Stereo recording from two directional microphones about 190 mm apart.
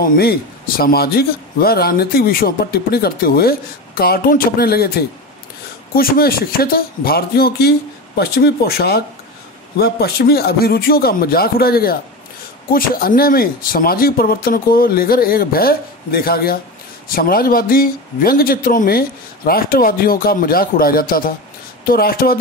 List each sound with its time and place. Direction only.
0.0 s a man's voice: 50° left (ahead or behind)